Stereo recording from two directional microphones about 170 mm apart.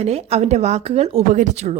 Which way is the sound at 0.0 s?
40° right (ahead or behind).